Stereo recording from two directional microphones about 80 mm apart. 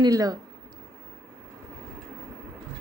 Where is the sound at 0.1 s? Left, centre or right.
Right.